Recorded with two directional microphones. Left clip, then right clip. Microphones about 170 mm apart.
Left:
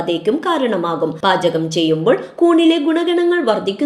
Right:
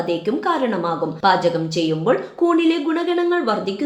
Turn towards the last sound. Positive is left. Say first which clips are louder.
# left 4 dB
turn(degrees=25)  # may be behind; listen again after turning